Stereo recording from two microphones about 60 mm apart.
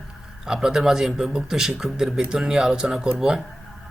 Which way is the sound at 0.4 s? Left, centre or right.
Centre.